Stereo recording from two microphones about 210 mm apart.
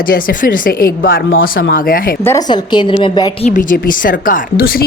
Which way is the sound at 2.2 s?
15° left (ahead or behind).